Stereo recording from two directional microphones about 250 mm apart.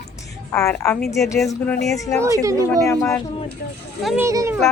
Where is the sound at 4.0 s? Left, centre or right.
Centre.